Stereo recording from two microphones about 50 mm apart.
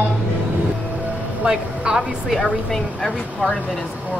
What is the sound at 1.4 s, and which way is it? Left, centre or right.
Speech, centre.